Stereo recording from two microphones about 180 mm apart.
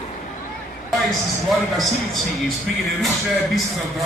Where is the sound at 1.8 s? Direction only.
Centre (ahead or behind).